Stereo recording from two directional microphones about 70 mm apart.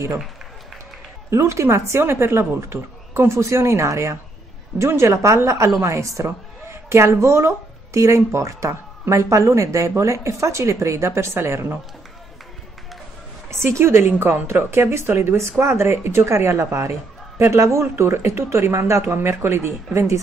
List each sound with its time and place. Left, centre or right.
1.3 s speech: right
13.5 s speech: right